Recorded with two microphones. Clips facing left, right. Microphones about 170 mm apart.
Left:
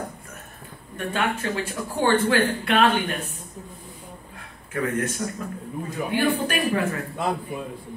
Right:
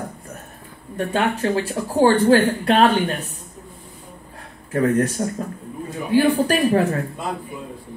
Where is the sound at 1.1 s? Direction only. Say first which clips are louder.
Right 5 dB; 35° right (ahead or behind).